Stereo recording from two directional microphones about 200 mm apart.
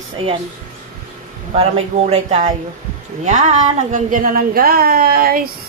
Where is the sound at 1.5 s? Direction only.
30° right (ahead or behind); by 5.4 s 45° right (ahead or behind).